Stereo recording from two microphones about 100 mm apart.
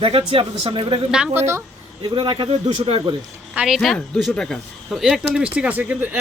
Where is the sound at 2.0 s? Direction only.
55° right (ahead or behind); by 3.0 s 75° right (ahead or behind).